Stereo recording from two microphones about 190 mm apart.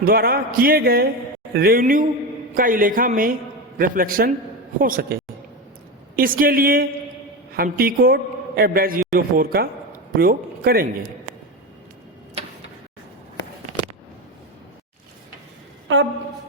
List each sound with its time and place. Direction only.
0.0 s a man's voice: 50° right (ahead or behind)
6.1 s a man's voice: 50° right (ahead or behind)